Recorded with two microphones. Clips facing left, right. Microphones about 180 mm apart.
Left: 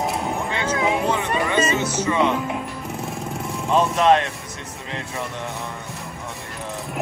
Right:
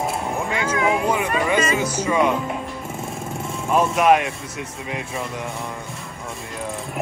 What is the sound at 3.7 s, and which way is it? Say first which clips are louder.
Speech: even; 10° right (ahead or behind).